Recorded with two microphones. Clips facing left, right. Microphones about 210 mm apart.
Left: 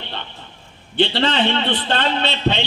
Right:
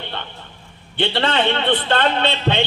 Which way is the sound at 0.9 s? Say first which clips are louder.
Left 1 dB; 55° right (ahead or behind).